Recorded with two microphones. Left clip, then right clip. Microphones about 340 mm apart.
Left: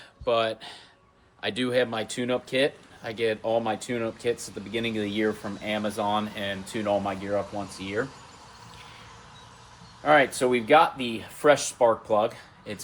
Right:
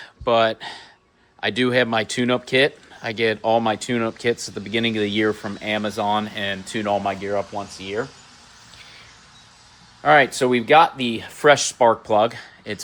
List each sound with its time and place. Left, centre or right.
0.0 s speech: centre
10.0 s speech: right